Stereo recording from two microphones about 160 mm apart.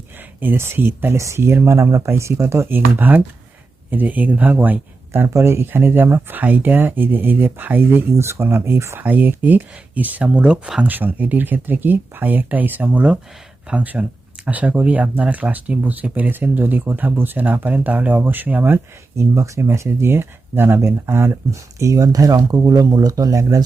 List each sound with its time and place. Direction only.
0.3 s speech: 15° right (ahead or behind)